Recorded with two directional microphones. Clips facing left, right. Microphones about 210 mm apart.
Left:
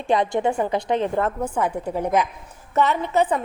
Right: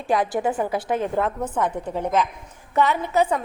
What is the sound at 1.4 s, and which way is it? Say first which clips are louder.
Speech: left 1 dB; 10° left (ahead or behind).